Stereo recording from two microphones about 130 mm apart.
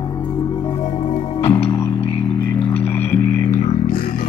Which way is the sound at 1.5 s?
15° left (ahead or behind).